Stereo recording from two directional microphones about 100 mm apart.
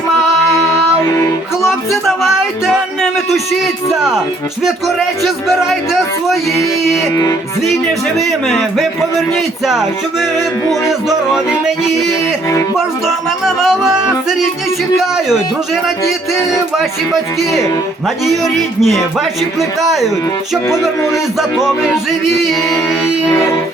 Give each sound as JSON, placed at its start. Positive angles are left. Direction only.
{"t": 1.0, "sound": "music", "side_deg": 30}
{"t": 1.6, "sound": "music", "side_deg": 0}
{"t": 3.9, "sound": "a man's voice", "side_deg": -5}
{"t": 8.2, "sound": "a man's voice", "side_deg": 0}
{"t": 13.4, "sound": "a man's voice", "side_deg": -5}
{"t": 18.3, "sound": "a man's voice", "side_deg": 0}